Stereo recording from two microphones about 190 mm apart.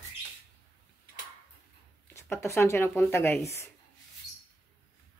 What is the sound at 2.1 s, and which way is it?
Speech, 15° left (ahead or behind).